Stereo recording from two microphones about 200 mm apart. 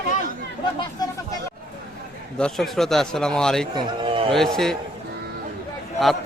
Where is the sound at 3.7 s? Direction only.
25° right (ahead or behind).